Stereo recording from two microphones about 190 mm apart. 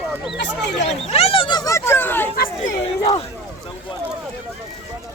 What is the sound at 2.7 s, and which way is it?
Speech, 25° left (ahead or behind).